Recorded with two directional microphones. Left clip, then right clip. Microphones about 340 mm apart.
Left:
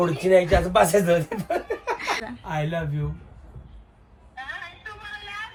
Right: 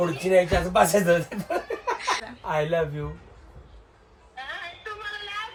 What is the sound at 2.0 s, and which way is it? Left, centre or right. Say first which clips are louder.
Laughter: even; centre.